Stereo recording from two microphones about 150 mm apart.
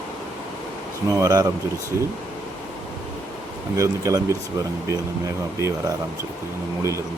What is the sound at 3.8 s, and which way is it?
Speech, 20° right (ahead or behind).